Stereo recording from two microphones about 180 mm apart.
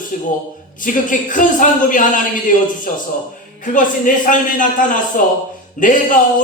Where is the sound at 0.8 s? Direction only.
45° left (ahead or behind).